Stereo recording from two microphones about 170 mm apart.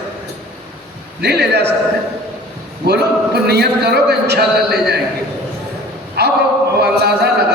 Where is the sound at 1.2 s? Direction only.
75° right (ahead or behind).